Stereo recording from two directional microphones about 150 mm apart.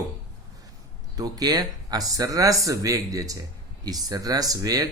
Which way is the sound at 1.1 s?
25° right (ahead or behind).